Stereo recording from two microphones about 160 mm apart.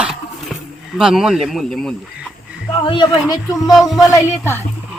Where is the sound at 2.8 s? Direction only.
30° left (ahead or behind).